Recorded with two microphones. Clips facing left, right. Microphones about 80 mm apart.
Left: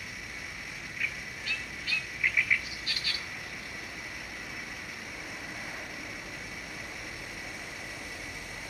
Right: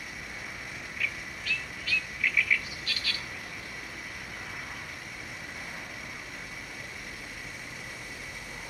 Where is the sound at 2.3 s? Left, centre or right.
Left.